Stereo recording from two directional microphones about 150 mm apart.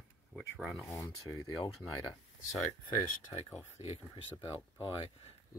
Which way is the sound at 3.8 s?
45° left (ahead or behind).